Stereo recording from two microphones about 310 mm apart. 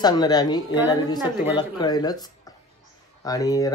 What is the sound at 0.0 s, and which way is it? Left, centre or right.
Speech, centre.